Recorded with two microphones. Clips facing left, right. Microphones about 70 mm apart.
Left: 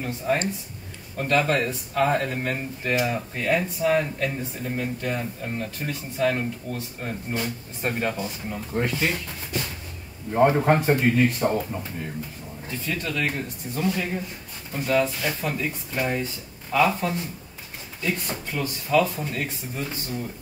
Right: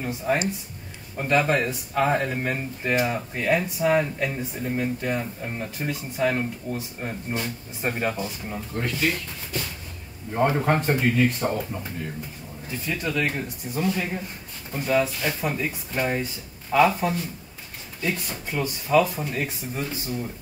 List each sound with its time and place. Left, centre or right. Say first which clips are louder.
0.0 s speech: even; centre
8.7 s speech: left 1 dB; left
10.5 s speech: left 2 dB; centre
12.6 s speech: right 1 dB; centre
18.5 s speech: right 2 dB; centre